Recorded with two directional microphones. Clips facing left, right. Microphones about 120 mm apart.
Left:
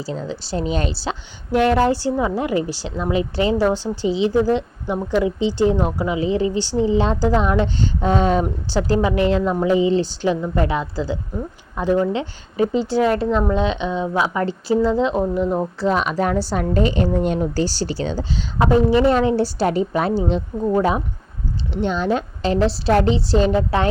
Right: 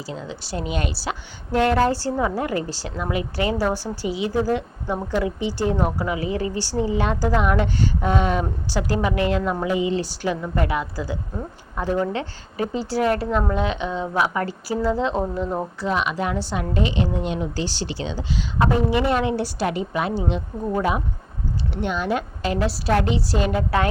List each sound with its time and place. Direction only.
0.0 s a woman's voice: 35° left (ahead or behind)
1.6 s a woman's voice: 20° left (ahead or behind)
9.4 s speech: 15° left (ahead or behind)
9.6 s a woman's voice: 30° left (ahead or behind)
15.8 s a woman's voice: 35° left (ahead or behind)
21.7 s a woman's voice: 30° left (ahead or behind)